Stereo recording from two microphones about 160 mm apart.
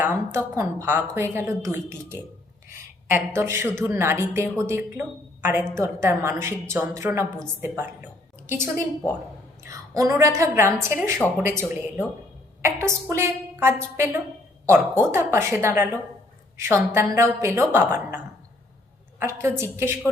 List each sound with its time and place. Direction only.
0.0 s a woman's voice: 15° right (ahead or behind)
9.6 s a woman's voice: 20° right (ahead or behind)
19.2 s a woman's voice: 15° right (ahead or behind)